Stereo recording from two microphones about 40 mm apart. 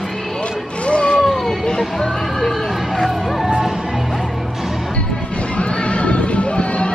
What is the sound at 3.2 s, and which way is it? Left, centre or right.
Music, centre.